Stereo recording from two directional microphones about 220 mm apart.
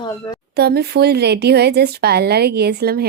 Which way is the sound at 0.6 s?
45° right (ahead or behind).